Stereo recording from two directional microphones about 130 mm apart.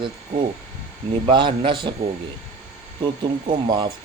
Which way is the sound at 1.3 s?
40° right (ahead or behind).